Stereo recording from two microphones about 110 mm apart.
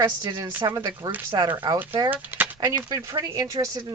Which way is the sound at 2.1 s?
15° right (ahead or behind).